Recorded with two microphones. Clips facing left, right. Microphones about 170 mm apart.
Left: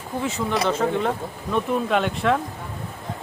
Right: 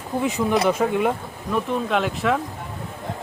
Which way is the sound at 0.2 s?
15° right (ahead or behind).